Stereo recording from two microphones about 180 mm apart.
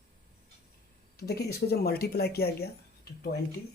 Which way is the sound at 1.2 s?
60° left (ahead or behind).